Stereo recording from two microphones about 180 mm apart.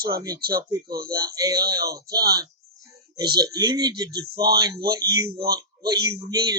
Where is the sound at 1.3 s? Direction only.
20° right (ahead or behind).